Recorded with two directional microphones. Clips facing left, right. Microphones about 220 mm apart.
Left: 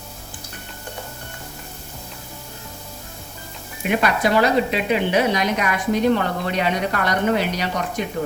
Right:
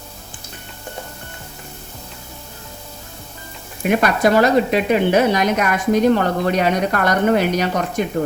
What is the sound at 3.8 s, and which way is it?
Speech, 45° right (ahead or behind).